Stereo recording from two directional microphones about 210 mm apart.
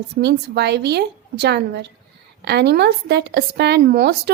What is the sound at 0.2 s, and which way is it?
Speech, 50° right (ahead or behind).